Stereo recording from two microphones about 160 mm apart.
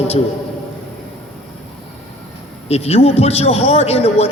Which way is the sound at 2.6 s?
40° left (ahead or behind).